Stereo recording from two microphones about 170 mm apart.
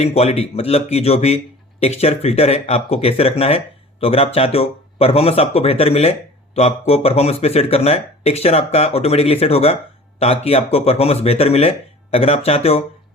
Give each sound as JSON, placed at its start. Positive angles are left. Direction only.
{"t": 0.0, "sound": "speech", "side_deg": 40}